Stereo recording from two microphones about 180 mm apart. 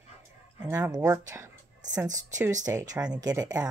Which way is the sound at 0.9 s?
20° right (ahead or behind).